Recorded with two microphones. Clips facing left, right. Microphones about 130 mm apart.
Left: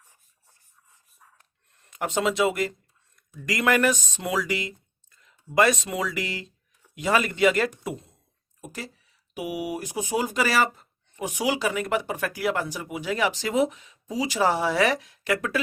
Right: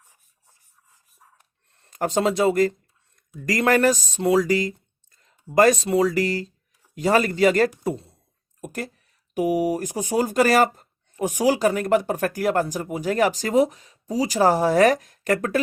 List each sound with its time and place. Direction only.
1.7 s speech: 35° right (ahead or behind)
8.6 s speech: 50° right (ahead or behind)